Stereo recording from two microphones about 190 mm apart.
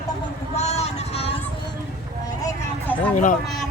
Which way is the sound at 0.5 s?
35° left (ahead or behind).